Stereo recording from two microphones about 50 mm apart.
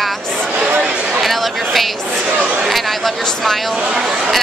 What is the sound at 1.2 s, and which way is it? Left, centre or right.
Speech, centre.